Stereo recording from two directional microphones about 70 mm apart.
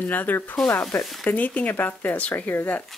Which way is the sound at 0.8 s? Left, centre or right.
Centre.